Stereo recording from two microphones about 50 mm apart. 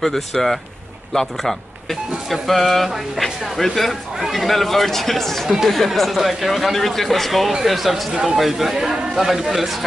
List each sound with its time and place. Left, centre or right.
0.0 s speech: centre
8.1 s speech: centre
8.4 s speech: centre